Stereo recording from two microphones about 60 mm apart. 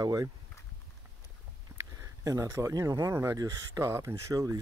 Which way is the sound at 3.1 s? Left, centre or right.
Right.